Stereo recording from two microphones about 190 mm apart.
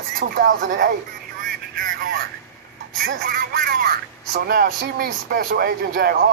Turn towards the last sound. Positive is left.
turn(degrees=-50)  # may be behind; listen again after turning